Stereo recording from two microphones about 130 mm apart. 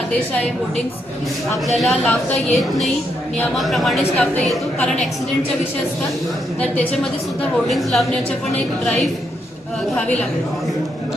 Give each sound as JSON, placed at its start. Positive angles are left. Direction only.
{"t": 1.6, "sound": "a woman's voice", "side_deg": 0}
{"t": 6.6, "sound": "a woman's voice", "side_deg": 10}